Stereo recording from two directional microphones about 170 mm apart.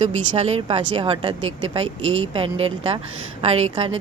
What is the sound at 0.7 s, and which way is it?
Speech, 35° right (ahead or behind).